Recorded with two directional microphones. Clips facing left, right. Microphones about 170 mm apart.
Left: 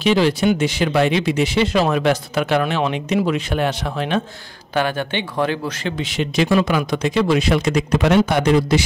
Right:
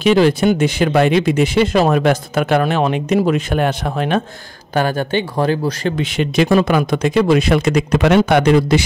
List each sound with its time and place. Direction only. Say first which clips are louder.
0.0 s speech: right 4 dB; 50° right (ahead or behind)
5.9 s a man's voice: right 2 dB; 55° right (ahead or behind)